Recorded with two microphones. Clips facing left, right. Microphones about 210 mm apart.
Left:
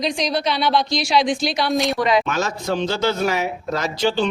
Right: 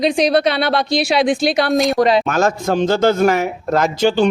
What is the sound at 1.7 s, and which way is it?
Speech, centre (ahead or behind).